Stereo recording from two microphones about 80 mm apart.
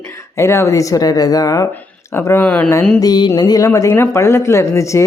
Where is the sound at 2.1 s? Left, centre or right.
Left.